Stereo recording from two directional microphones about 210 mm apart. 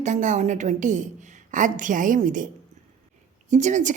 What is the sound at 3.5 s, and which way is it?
Speech, 35° right (ahead or behind).